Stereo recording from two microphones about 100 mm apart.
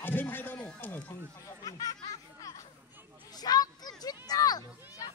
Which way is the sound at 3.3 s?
40° left (ahead or behind).